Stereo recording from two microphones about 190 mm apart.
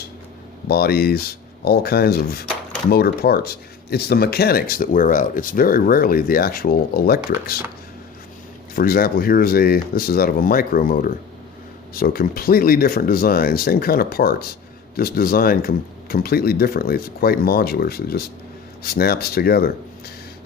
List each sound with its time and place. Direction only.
0.7 s speech: 55° left (ahead or behind)
8.7 s speech: 50° left (ahead or behind)